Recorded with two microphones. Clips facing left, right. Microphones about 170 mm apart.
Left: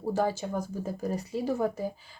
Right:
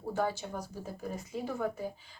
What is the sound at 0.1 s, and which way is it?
Speech, 35° left (ahead or behind).